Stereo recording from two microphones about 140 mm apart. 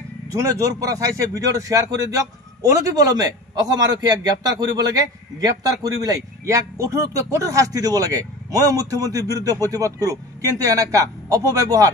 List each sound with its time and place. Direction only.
0.3 s a man's voice: 25° right (ahead or behind)